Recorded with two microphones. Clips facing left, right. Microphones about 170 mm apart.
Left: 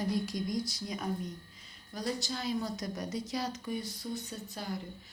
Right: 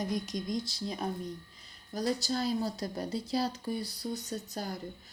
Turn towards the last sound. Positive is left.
turn(degrees=-40)  # may be behind; listen again after turning